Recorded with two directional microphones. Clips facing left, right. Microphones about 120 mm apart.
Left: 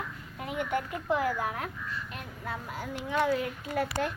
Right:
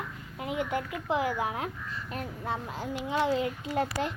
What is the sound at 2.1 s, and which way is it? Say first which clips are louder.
Speech: right 4 dB; 40° right (ahead or behind).